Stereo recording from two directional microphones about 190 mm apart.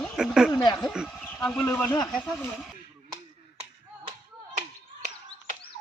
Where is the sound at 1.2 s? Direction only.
5° left (ahead or behind).